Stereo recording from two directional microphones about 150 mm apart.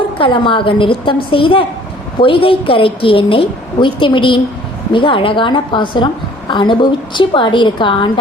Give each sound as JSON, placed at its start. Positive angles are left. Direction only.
{"t": 0.2, "sound": "a woman's voice", "side_deg": 35}